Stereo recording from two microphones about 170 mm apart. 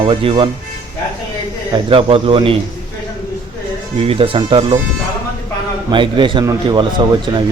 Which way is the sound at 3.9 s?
35° right (ahead or behind).